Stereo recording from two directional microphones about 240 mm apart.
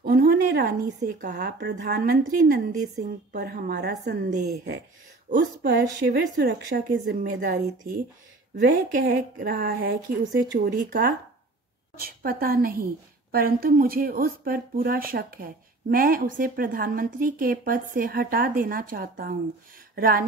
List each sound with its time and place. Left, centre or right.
0.0 s speech: right
5.6 s a woman's voice: right